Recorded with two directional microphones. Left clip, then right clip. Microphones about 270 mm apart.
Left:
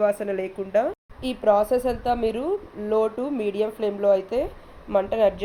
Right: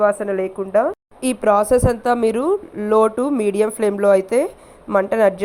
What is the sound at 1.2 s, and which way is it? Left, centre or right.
A woman's voice, right.